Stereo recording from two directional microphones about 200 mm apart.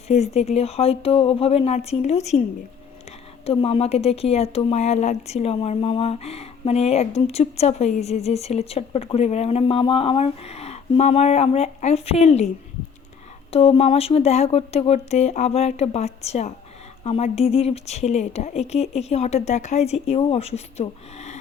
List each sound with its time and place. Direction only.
0.1 s speech: 35° left (ahead or behind)
3.4 s speech: 30° left (ahead or behind)
13.5 s speech: 30° left (ahead or behind)